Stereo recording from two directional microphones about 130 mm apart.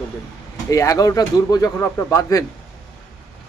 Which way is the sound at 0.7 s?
25° left (ahead or behind).